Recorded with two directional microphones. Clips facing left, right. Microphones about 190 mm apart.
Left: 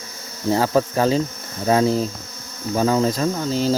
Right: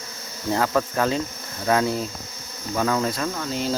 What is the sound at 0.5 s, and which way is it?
Cricket, 30° left (ahead or behind).